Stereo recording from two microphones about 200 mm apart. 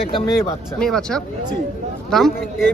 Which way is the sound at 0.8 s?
5° left (ahead or behind).